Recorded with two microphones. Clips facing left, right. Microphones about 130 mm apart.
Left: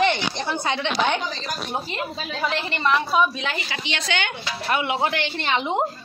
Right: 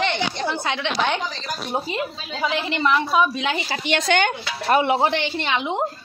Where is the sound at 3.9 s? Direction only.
50° right (ahead or behind); by 5.2 s 30° right (ahead or behind).